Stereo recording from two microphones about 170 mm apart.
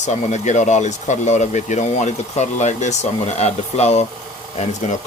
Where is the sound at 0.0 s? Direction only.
45° left (ahead or behind).